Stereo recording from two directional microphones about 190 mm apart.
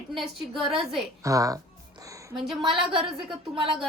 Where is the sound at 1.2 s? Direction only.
15° right (ahead or behind).